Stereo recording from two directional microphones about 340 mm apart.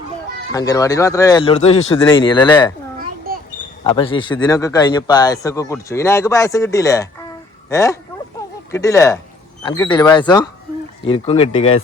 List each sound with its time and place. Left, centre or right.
0.5 s speech: centre
3.8 s speech: centre